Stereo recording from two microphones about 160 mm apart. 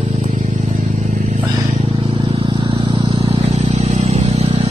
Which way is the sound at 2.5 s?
30° right (ahead or behind).